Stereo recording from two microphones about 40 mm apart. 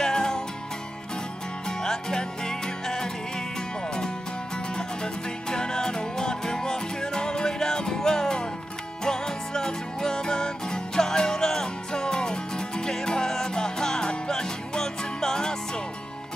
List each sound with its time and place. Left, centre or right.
0.0 s music: centre
1.7 s music: centre
4.7 s music: centre